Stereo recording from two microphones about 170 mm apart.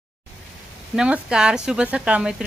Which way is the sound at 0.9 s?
5° right (ahead or behind).